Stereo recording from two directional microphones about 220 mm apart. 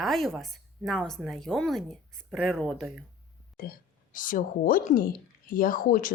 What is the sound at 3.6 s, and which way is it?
Speech, 40° left (ahead or behind).